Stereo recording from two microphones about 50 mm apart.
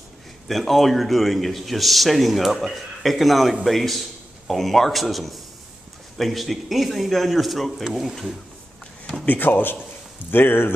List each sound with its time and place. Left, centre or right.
0.5 s a man's voice: centre
9.2 s speech: left